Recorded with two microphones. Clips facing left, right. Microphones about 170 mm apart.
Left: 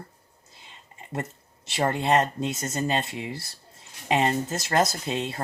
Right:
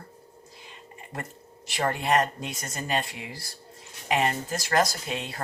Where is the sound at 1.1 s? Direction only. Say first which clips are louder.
Left 6 dB; 25° left (ahead or behind).